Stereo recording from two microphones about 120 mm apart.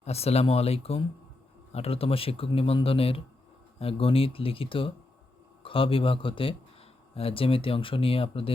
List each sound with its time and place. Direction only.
0.0 s speech: 60° left (ahead or behind)